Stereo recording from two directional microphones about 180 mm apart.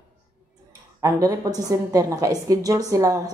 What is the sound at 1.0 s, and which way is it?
Speech, 20° right (ahead or behind).